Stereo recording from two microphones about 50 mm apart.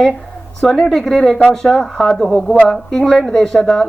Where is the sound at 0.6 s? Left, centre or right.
Centre.